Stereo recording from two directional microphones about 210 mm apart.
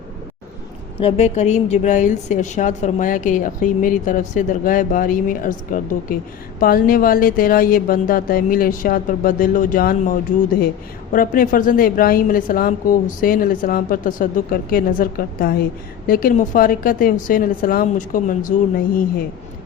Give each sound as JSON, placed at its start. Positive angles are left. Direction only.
{"t": 0.9, "sound": "a woman's voice", "side_deg": 30}